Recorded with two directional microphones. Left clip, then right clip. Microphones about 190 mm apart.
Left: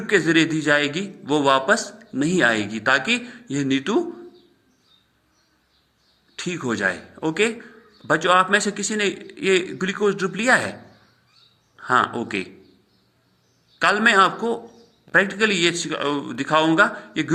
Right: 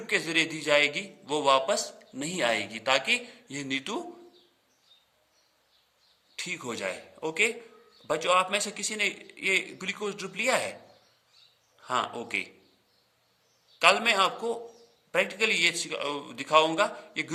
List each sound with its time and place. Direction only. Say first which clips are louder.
0.0 s a man's voice: left 9 dB; 10° right (ahead or behind)
6.3 s a man's voice: left 8 dB; 10° right (ahead or behind)
11.8 s a man's voice: left 10 dB; 10° right (ahead or behind)
13.7 s a man's voice: left 6 dB; 10° right (ahead or behind)